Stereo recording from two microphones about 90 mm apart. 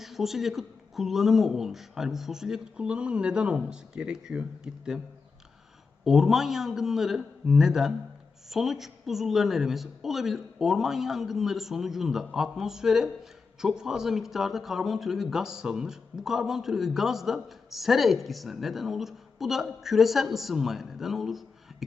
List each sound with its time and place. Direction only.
0.0 s speech: 5° right (ahead or behind)
6.1 s speech: 5° right (ahead or behind)